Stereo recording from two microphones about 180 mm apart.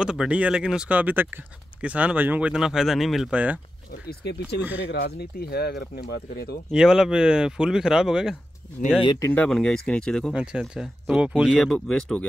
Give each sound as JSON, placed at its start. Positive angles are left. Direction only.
{"t": 0.0, "sound": "speech", "side_deg": -5}
{"t": 4.1, "sound": "speech", "side_deg": 65}
{"t": 6.7, "sound": "speech", "side_deg": -5}
{"t": 9.0, "sound": "speech", "side_deg": 25}
{"t": 9.3, "sound": "speech", "side_deg": 5}